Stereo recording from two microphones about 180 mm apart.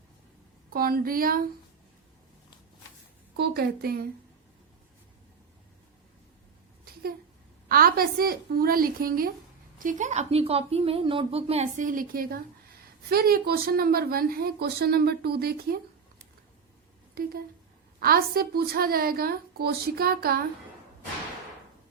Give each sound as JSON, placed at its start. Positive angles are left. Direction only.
{"t": 0.7, "sound": "a woman's voice", "side_deg": -55}
{"t": 3.3, "sound": "speech", "side_deg": -60}
{"t": 7.7, "sound": "speech", "side_deg": -55}
{"t": 9.7, "sound": "a woman's voice", "side_deg": -45}
{"t": 18.0, "sound": "speech", "side_deg": -55}